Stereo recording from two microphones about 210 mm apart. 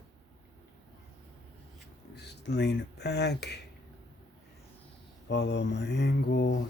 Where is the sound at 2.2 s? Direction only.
55° left (ahead or behind).